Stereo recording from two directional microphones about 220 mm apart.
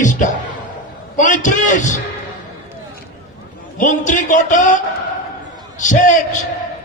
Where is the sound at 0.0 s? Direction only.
35° left (ahead or behind).